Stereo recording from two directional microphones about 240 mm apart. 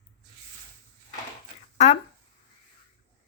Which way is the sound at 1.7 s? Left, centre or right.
Left.